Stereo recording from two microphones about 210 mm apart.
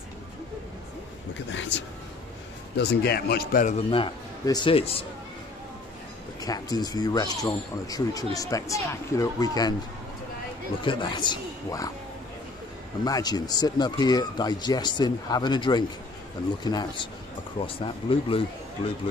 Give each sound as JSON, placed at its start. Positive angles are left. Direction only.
{"t": 1.5, "sound": "speech", "side_deg": 60}
{"t": 2.8, "sound": "speech", "side_deg": 50}
{"t": 3.9, "sound": "speech", "side_deg": 20}
{"t": 6.4, "sound": "speech", "side_deg": 20}
{"t": 10.8, "sound": "speech", "side_deg": 25}
{"t": 13.0, "sound": "speech", "side_deg": 20}